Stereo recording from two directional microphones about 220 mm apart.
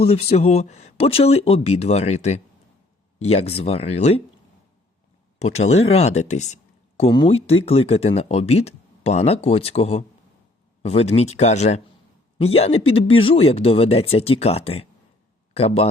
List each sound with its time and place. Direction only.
0.0 s speech: 25° left (ahead or behind)
5.5 s speech: 30° left (ahead or behind)